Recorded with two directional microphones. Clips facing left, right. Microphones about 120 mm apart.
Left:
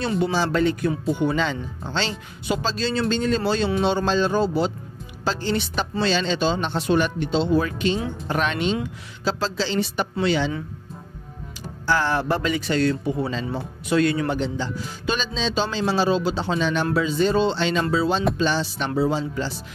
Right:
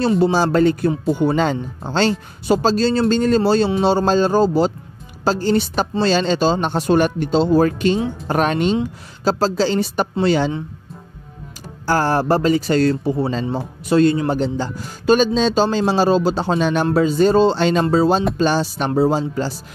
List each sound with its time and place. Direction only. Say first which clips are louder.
0.2 s a man's voice: right 4 dB; 40° right (ahead or behind)
11.8 s a man's voice: right 5 dB; 40° right (ahead or behind)